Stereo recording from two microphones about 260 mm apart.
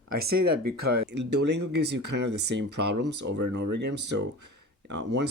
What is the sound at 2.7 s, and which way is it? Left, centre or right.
Speech, right.